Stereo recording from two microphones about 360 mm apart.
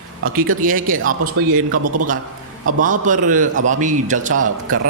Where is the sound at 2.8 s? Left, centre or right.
Right.